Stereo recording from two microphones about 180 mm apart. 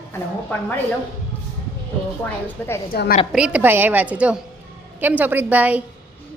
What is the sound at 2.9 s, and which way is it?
Speech, 55° left (ahead or behind).